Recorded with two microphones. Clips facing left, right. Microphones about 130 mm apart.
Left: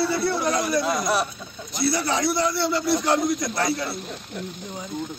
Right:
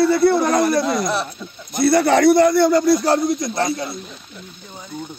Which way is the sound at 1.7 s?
55° right (ahead or behind).